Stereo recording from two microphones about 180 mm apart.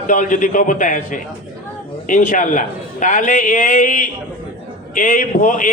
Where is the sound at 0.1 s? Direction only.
45° left (ahead or behind).